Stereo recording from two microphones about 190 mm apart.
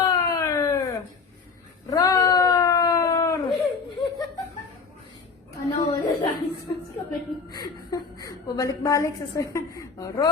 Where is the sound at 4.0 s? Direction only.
20° left (ahead or behind).